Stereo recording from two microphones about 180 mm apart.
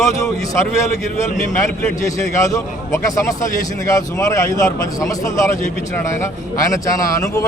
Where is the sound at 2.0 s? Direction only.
15° left (ahead or behind).